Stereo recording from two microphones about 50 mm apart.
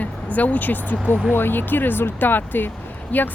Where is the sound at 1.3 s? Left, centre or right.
Left.